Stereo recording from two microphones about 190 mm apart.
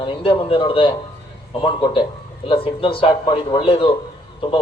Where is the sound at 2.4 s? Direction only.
30° left (ahead or behind).